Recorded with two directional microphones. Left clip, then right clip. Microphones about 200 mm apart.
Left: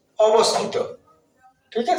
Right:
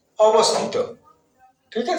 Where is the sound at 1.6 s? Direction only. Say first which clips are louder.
Left 1 dB; 15° right (ahead or behind).